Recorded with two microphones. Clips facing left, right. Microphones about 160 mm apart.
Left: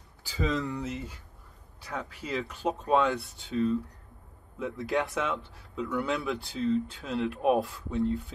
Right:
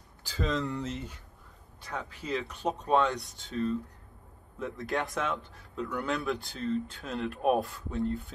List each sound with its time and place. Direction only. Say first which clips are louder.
0.3 s speech: left 1 dB; 5° left (ahead or behind)
3.2 s speech: left 1 dB; 40° right (ahead or behind)
3.4 s speech: left 3 dB; centre (ahead or behind)